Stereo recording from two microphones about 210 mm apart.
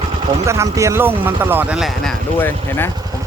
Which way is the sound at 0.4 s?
15° right (ahead or behind).